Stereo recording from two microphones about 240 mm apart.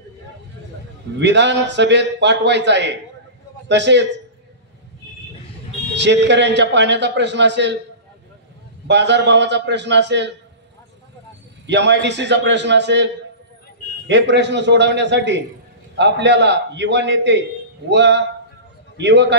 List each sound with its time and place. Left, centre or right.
1.2 s a man's voice: right
5.9 s a man's voice: right
8.8 s a man's voice: right
11.6 s a man's voice: right